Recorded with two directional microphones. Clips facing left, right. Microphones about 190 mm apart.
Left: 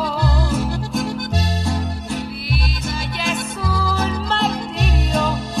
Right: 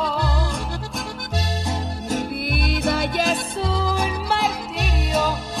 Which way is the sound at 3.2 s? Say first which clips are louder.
Right 1 dB; 30° right (ahead or behind).